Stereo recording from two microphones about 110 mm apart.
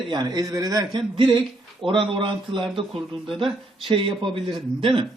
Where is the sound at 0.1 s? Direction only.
35° right (ahead or behind).